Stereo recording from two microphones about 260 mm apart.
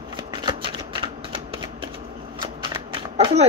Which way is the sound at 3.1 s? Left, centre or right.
Right.